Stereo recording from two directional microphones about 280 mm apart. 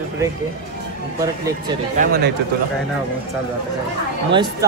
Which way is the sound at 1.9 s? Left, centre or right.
Right.